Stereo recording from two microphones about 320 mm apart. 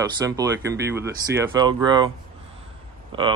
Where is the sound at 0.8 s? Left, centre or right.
Centre.